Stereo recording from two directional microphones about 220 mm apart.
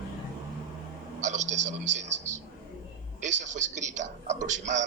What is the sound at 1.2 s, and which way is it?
A man's voice, 35° right (ahead or behind).